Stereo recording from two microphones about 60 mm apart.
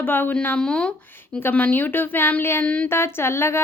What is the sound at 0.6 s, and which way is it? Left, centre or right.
Speech, centre.